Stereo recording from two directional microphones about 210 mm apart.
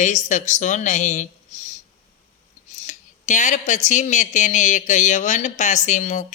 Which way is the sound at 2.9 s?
35° left (ahead or behind).